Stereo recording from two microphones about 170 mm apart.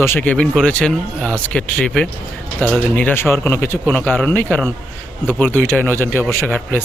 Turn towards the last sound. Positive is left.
turn(degrees=10)  # may be behind; listen again after turning